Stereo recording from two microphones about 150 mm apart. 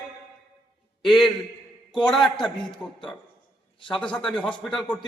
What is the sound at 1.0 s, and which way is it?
Speech, centre (ahead or behind).